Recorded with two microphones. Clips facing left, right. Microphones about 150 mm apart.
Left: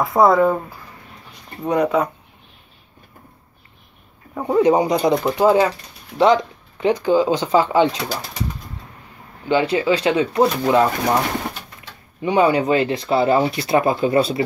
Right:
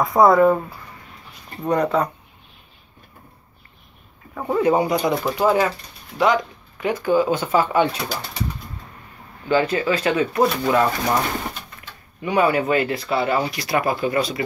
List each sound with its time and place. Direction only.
0.0 s speech: centre (ahead or behind)
4.4 s speech: 15° left (ahead or behind)
9.5 s speech: 15° left (ahead or behind)
12.2 s speech: 20° left (ahead or behind)